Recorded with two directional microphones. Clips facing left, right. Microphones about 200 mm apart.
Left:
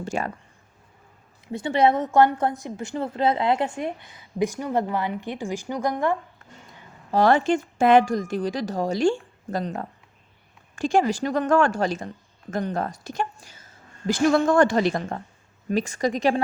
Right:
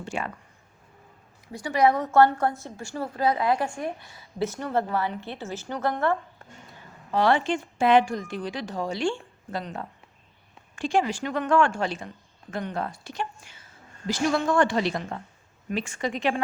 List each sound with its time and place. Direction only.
0.0 s speech: 40° left (ahead or behind)
1.5 s a woman's voice: 25° left (ahead or behind)
7.1 s a woman's voice: 45° left (ahead or behind)